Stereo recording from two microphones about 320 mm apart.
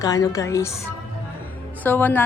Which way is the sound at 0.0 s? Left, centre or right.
Centre.